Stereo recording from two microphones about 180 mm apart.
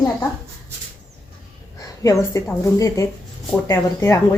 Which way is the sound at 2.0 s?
15° left (ahead or behind).